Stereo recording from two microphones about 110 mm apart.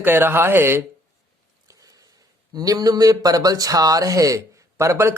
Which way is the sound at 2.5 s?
35° right (ahead or behind).